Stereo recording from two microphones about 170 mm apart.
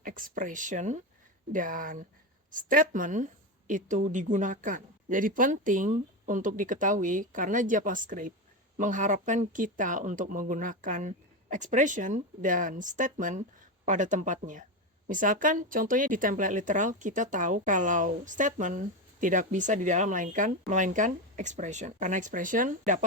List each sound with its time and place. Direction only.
0.0 s speech: 55° right (ahead or behind)